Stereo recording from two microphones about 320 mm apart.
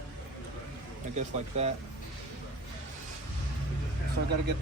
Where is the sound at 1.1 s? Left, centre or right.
Right.